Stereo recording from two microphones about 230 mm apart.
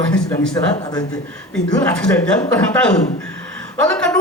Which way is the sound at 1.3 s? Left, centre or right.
Centre.